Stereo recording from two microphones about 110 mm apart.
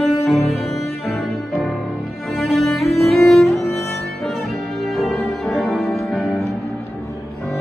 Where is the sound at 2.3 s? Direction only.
Centre (ahead or behind).